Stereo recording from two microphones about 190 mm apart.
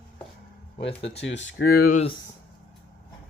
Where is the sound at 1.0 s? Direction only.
65° left (ahead or behind).